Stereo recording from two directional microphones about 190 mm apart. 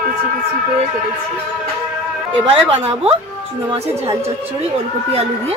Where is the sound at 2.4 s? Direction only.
25° right (ahead or behind).